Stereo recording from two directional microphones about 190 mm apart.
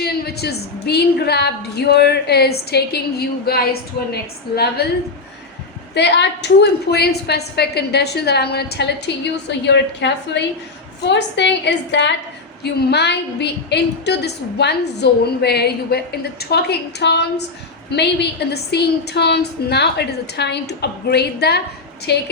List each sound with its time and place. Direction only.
0.0 s a woman's voice: 55° left (ahead or behind)
5.9 s a woman's voice: 65° left (ahead or behind)